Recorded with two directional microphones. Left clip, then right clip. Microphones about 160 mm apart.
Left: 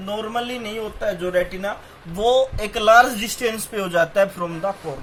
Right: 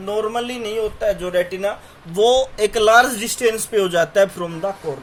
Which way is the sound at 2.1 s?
35° right (ahead or behind).